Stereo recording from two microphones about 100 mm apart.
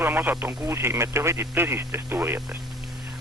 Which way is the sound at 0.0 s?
20° right (ahead or behind).